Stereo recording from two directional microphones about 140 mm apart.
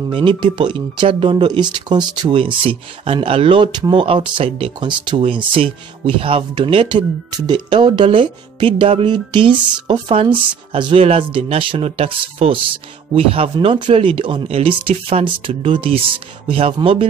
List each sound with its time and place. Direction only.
0.1 s speech: 35° right (ahead or behind)